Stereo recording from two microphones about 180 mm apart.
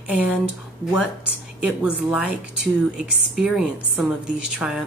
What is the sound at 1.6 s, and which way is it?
A woman's voice, 5° right (ahead or behind).